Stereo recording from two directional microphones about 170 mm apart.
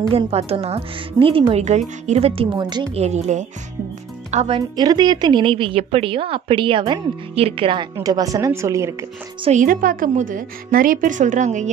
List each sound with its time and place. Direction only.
0.1 s a woman's voice: 35° right (ahead or behind)
3.0 s a woman's voice: 40° right (ahead or behind)
4.7 s speech: 25° right (ahead or behind)
9.4 s a woman's voice: 45° right (ahead or behind)